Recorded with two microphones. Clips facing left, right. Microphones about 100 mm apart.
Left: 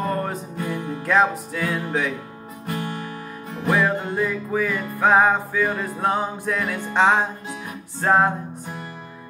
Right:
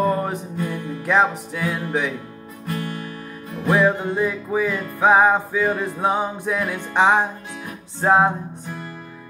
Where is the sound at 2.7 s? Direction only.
25° left (ahead or behind).